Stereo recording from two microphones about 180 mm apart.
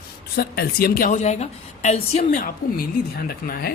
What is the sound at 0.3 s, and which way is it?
A woman's voice, 55° left (ahead or behind).